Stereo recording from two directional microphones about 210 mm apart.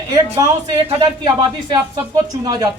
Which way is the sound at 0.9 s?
20° right (ahead or behind).